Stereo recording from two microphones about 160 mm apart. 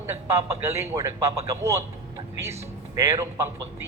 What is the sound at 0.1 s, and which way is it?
Speech, 20° right (ahead or behind).